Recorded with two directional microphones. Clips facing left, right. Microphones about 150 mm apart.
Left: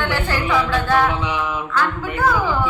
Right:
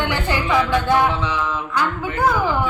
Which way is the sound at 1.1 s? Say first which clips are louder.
Even; 15° left (ahead or behind).